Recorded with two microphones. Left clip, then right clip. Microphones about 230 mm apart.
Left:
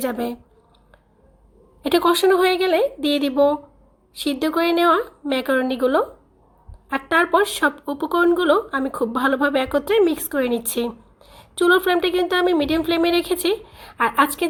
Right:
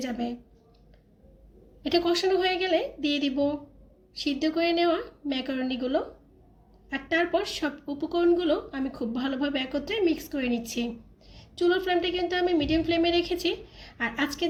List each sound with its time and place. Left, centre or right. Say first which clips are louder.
0.0 s speech: left 8 dB; left
1.8 s a woman's voice: left 8 dB; left
6.9 s speech: left 8 dB; left